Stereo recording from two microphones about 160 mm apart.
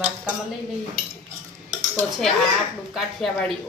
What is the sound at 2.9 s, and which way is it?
Speech, centre (ahead or behind).